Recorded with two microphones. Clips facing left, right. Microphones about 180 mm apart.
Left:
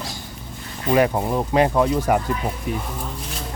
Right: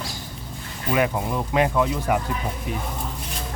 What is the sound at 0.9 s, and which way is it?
Speech, 35° left (ahead or behind).